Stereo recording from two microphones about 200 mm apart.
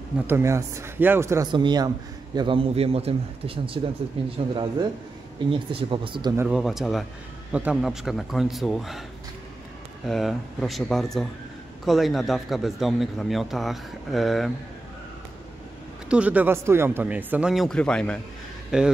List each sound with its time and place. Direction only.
0.3 s a man's voice: 15° right (ahead or behind)
5.5 s a man's voice: 25° right (ahead or behind)
6.3 s a man's voice: 5° right (ahead or behind)
10.0 s a man's voice: centre (ahead or behind)
16.1 s a man's voice: 5° right (ahead or behind)